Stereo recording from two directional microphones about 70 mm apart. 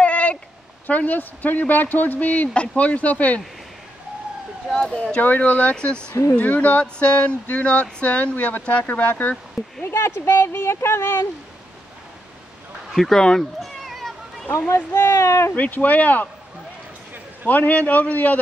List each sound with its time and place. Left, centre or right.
0.0 s a sound: centre
0.8 s speech: left
4.6 s speech: centre
5.2 s speech: left
9.8 s speech: left
12.9 s speech: centre
13.6 s a sound: centre
15.0 s speech: left
15.5 s speech: left
17.5 s speech: left